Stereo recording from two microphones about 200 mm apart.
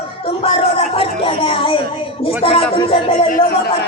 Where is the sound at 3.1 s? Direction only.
40° left (ahead or behind).